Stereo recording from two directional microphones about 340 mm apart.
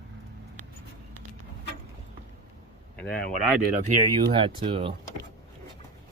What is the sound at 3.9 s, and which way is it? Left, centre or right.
Speech, centre.